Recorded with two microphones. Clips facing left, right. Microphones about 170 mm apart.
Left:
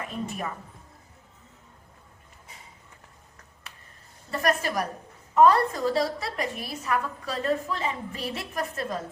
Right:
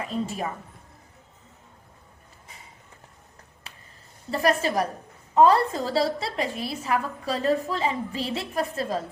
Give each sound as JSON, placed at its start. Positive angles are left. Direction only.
{"t": 0.1, "sound": "a woman's voice", "side_deg": -30}
{"t": 4.3, "sound": "a woman's voice", "side_deg": -30}